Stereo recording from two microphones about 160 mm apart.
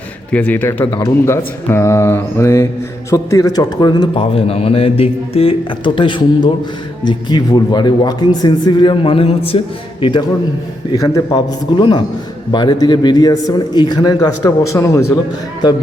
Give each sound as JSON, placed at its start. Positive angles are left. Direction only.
{"t": 0.3, "sound": "mantra", "side_deg": 10}
{"t": 3.1, "sound": "a man's voice", "side_deg": 20}